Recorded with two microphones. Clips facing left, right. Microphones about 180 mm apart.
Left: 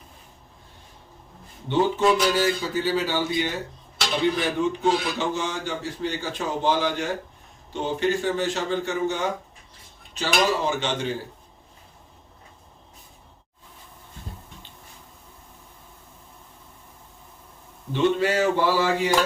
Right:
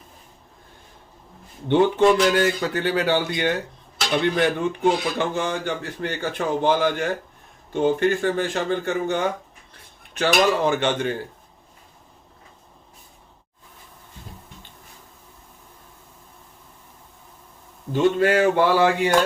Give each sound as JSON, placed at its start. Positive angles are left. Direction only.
{"t": 1.6, "sound": "a man's voice", "side_deg": -60}
{"t": 17.9, "sound": "a man's voice", "side_deg": -50}